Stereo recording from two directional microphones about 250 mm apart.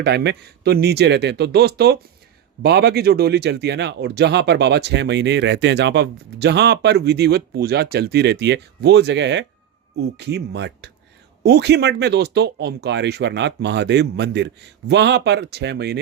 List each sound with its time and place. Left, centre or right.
0.0 s speech: right